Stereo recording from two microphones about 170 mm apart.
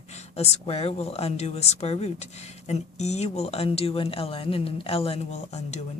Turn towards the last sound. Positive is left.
turn(degrees=40)  # may be behind; listen again after turning